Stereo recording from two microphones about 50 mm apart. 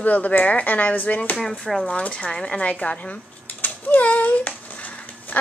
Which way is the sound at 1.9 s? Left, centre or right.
Left.